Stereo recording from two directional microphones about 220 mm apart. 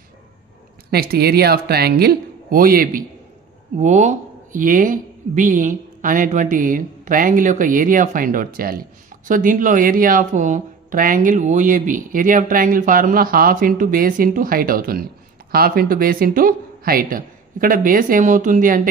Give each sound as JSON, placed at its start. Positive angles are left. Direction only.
{"t": 0.8, "sound": "speech", "side_deg": -45}